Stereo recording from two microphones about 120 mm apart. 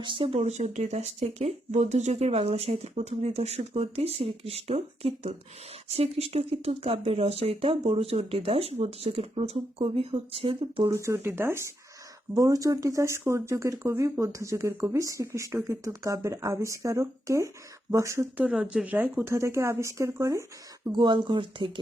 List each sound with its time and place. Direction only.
0.0 s speech: 45° right (ahead or behind)
0.3 s speech: 65° right (ahead or behind); by 10.8 s 45° right (ahead or behind)
10.8 s speech: 25° right (ahead or behind)
18.3 s speech: 10° right (ahead or behind)
20.9 s speech: 40° right (ahead or behind)